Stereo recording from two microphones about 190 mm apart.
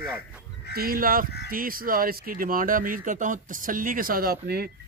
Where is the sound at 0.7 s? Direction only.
50° right (ahead or behind).